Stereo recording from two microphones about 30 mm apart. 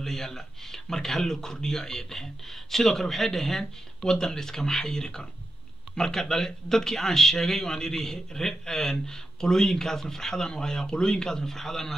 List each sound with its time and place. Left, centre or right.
0.0 s a man's voice: centre
11.3 s speech: centre